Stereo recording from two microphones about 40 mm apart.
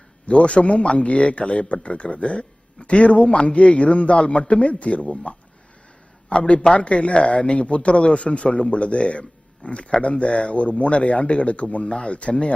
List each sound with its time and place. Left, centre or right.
0.3 s speech: left
6.2 s a man's voice: left